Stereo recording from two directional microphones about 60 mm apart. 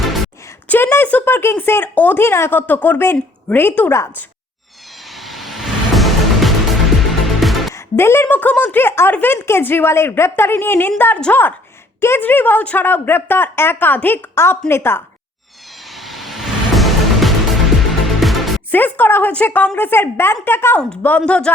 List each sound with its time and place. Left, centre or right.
0.8 s a woman's voice: left
2.2 s a woman's voice: left
5.0 s music: centre
7.7 s music: left
8.2 s a woman's voice: left
14.3 s a woman's voice: left
15.9 s music: centre
18.7 s a woman's voice: left
21.2 s speech: centre